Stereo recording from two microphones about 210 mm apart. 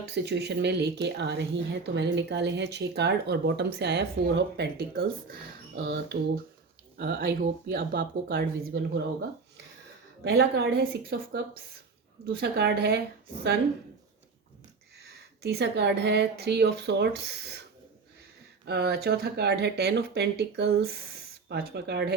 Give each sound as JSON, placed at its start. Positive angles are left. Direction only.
{"t": 0.1, "sound": "speech", "side_deg": -55}
{"t": 10.2, "sound": "speech", "side_deg": -50}
{"t": 15.4, "sound": "speech", "side_deg": -55}
{"t": 18.6, "sound": "speech", "side_deg": -50}